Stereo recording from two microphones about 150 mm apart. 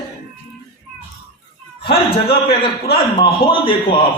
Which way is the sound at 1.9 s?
90° left.